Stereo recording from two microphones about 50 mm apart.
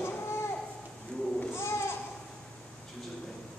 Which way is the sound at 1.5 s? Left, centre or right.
Left.